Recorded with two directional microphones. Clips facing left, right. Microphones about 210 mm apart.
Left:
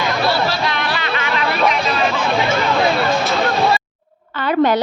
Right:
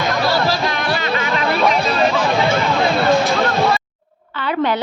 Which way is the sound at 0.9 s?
40° right (ahead or behind).